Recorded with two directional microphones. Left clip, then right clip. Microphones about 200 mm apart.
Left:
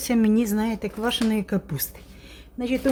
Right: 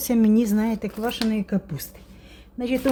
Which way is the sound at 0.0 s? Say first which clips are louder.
Right 1 dB; 10° right (ahead or behind).